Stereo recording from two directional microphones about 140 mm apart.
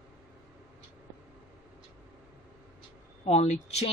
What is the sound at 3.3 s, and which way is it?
Speech, 50° left (ahead or behind).